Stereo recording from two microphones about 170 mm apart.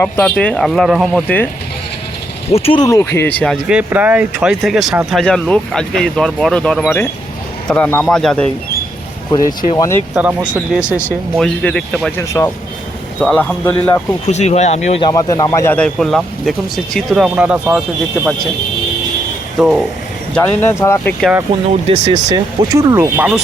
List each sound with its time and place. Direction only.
0.0 s speech: 10° left (ahead or behind)
2.5 s speech: 35° left (ahead or behind)
2.8 s speech: 15° left (ahead or behind)
9.7 s speech: 20° left (ahead or behind)
10.2 s speech: 5° right (ahead or behind)
11.3 s speech: 5° left (ahead or behind)
12.1 s speech: 15° left (ahead or behind)
14.3 s speech: 40° left (ahead or behind)
15.0 s speech: 20° left (ahead or behind); by 17.8 s 10° right (ahead or behind)
19.5 s speech: centre (ahead or behind)
20.3 s speech: 15° left (ahead or behind)
21.8 s speech: 25° right (ahead or behind); by 23.4 s 10° right (ahead or behind)